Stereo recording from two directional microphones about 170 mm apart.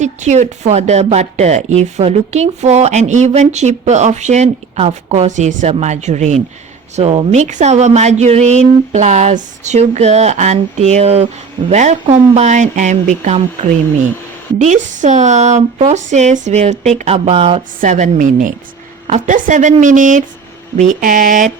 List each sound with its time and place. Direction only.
0.0 s a woman's voice: 45° right (ahead or behind)
17.7 s speech: 45° right (ahead or behind)